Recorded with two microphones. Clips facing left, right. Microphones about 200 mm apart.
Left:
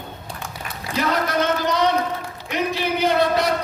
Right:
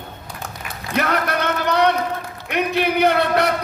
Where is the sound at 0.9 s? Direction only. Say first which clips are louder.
Even; 60° right (ahead or behind).